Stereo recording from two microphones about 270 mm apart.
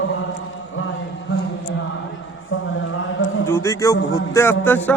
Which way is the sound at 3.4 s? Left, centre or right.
Centre.